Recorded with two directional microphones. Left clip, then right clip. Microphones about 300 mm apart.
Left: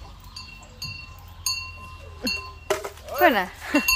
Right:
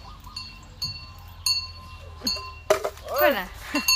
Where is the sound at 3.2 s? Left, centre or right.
Centre.